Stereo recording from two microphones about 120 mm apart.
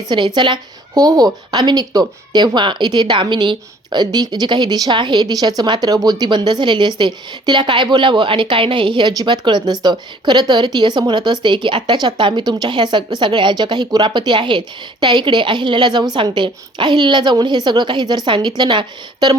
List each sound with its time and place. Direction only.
0.1 s a woman's voice: 40° right (ahead or behind)